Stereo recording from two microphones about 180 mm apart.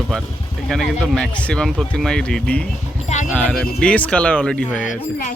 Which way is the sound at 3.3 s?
5° left (ahead or behind).